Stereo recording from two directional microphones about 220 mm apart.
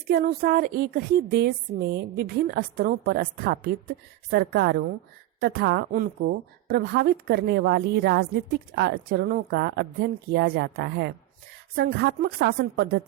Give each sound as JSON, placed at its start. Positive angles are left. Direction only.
{"t": 0.1, "sound": "a woman's voice", "side_deg": -45}